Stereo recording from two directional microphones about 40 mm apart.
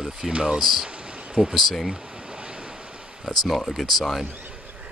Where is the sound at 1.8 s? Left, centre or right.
Right.